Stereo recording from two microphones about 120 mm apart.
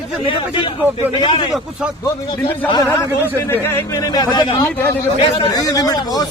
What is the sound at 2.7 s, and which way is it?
Speech, 30° left (ahead or behind).